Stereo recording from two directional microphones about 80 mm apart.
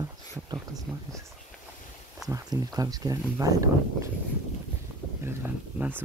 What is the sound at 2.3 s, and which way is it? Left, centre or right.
Speech, right.